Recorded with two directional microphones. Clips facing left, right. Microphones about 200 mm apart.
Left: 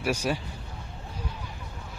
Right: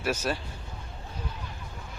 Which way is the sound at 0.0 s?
10° left (ahead or behind).